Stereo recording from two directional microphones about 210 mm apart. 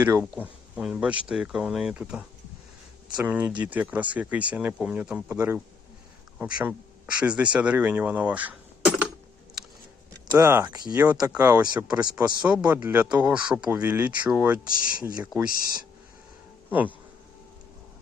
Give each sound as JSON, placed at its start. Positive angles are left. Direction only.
{"t": 0.0, "sound": "speech", "side_deg": -10}
{"t": 10.2, "sound": "speech", "side_deg": -15}
{"t": 14.7, "sound": "speech", "side_deg": 40}
{"t": 15.2, "sound": "speech", "side_deg": -5}
{"t": 16.6, "sound": "speech", "side_deg": -10}